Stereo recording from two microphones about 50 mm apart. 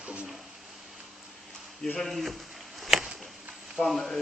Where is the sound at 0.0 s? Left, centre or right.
Right.